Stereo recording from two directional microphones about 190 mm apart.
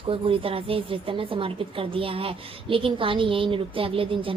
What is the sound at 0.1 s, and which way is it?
A woman's voice, 30° right (ahead or behind).